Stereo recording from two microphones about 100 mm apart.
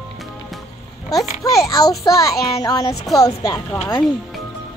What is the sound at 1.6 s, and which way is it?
Speech, 40° left (ahead or behind).